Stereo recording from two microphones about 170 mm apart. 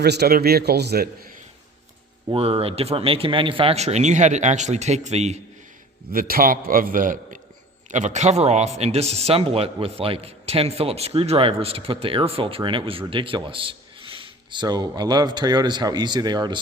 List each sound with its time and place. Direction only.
0.0 s a man's voice: 70° right (ahead or behind)
2.3 s speech: 35° right (ahead or behind)
6.1 s a man's voice: 60° right (ahead or behind); by 16.6 s 25° right (ahead or behind)